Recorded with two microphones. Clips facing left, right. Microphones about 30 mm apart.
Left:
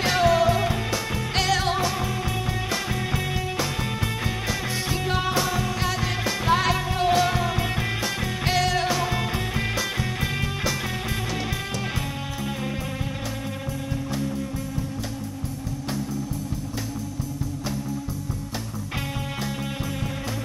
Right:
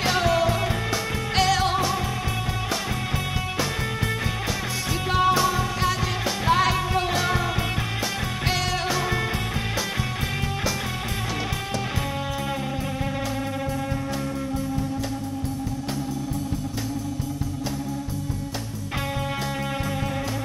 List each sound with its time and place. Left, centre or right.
0.0 s music: centre
5.1 s music: centre
8.5 s music: centre